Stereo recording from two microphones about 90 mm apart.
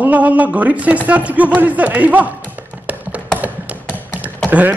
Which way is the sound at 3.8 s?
20° left (ahead or behind).